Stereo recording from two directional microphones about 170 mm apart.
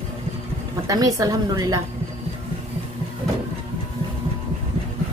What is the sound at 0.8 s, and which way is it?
Speech, 20° right (ahead or behind).